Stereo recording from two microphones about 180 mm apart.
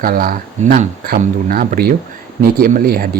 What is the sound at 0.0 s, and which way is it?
Speech, 50° right (ahead or behind).